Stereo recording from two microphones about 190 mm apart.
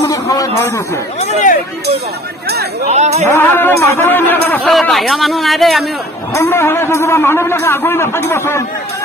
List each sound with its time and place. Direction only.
0.1 s music: 15° left (ahead or behind)
1.2 s speech: 40° left (ahead or behind)
2.9 s speech: 35° right (ahead or behind)
3.3 s a man's voice: 10° left (ahead or behind)
6.3 s a man's voice: 15° left (ahead or behind)